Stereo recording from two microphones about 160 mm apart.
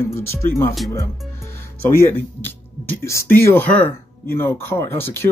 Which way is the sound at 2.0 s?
15° left (ahead or behind).